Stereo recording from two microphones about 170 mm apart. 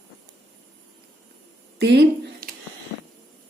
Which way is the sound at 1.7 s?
80° right.